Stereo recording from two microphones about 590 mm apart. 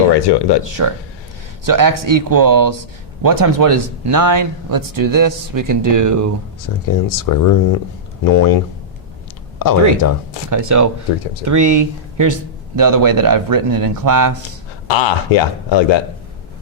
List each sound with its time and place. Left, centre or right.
0.3 s speech: left
0.6 s speech: right
6.6 s speech: left
9.6 s speech: left
10.5 s speech: right
14.8 s speech: left